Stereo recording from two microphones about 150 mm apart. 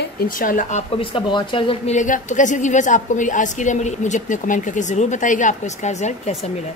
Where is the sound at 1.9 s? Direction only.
60° left (ahead or behind).